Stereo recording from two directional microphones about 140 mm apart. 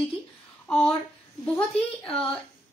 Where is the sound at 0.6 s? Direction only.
10° left (ahead or behind).